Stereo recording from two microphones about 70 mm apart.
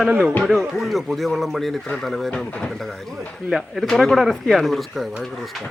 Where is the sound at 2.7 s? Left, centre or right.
Centre.